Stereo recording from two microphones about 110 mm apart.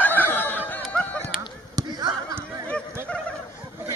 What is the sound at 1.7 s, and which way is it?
Basketball bounce, 35° right (ahead or behind).